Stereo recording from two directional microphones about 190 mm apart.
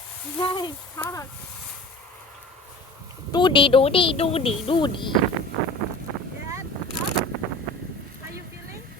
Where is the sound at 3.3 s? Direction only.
25° left (ahead or behind).